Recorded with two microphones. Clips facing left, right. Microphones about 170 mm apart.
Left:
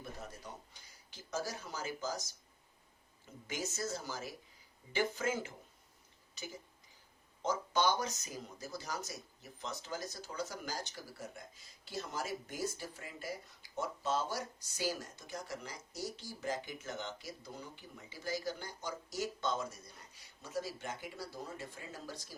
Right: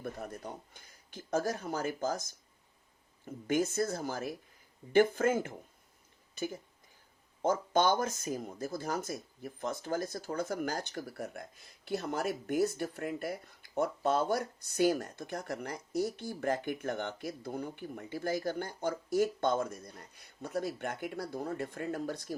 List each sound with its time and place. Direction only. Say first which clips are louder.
0.0 s speech: right 7 dB; 55° right (ahead or behind)